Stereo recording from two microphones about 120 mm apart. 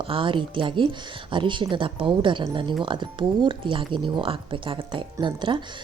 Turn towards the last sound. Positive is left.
turn(degrees=-45)  # may be behind; listen again after turning